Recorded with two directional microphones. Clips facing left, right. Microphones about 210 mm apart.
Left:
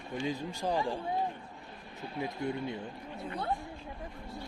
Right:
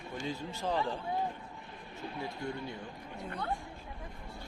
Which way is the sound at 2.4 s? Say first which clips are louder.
Left 5 dB; 20° left (ahead or behind).